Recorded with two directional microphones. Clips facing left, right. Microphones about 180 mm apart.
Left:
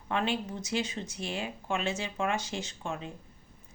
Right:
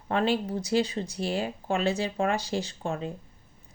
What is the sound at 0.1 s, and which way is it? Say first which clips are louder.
Speech: right 5 dB; 35° right (ahead or behind).